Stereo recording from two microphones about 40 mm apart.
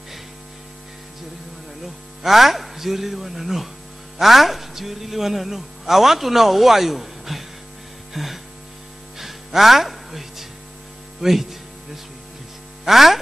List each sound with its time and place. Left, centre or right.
2.2 s speech: centre
8.1 s music: centre
11.1 s a man's voice: centre
12.8 s speech: centre